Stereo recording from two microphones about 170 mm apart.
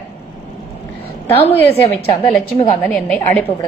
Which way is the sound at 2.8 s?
10° left (ahead or behind).